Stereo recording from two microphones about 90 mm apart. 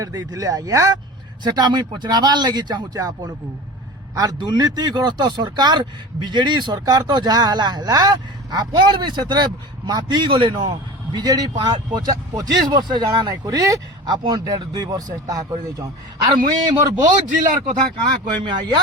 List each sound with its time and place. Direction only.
0.0 s speech: 40° right (ahead or behind)
1.5 s a man's voice: 50° right (ahead or behind)
4.4 s speech: 50° right (ahead or behind)
11.1 s a man's voice: 45° right (ahead or behind)
18.0 s a man's voice: 60° right (ahead or behind)